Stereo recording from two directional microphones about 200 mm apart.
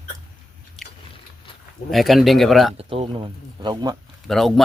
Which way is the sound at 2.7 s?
30° right (ahead or behind).